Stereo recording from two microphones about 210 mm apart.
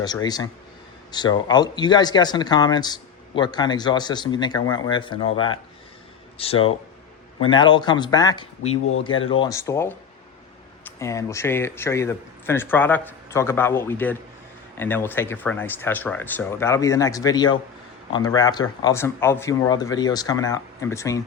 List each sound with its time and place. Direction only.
0.0 s speech: 20° left (ahead or behind)
8.8 s speech: 80° left
9.2 s speech: 25° left (ahead or behind)